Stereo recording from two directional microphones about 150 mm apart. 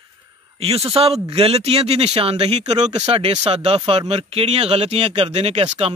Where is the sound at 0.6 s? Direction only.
40° right (ahead or behind).